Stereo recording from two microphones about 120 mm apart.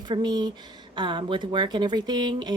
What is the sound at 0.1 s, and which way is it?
A woman's voice, 35° right (ahead or behind).